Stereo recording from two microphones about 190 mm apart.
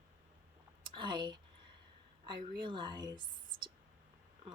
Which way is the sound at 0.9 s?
25° right (ahead or behind).